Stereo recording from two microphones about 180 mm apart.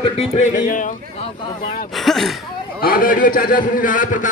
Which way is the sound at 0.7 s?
45° left (ahead or behind).